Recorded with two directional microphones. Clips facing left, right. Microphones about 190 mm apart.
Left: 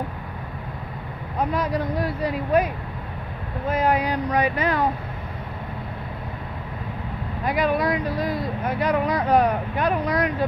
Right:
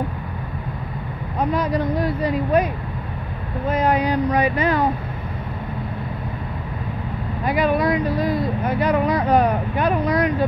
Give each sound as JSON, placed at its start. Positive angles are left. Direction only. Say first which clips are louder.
{"t": 1.5, "sound": "speech", "louder": "right 5 dB", "side_deg": 0}
{"t": 3.7, "sound": "speech", "louder": "right 3 dB", "side_deg": 5}
{"t": 7.4, "sound": "speech", "louder": "right 3 dB", "side_deg": 0}